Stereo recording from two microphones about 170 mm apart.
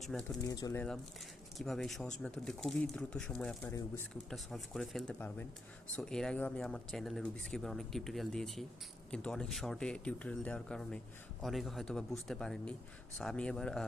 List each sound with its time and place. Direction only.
0.0 s speech: centre (ahead or behind)
0.4 s speech: 20° left (ahead or behind)
1.5 s speech: centre (ahead or behind)
4.3 s speech: centre (ahead or behind)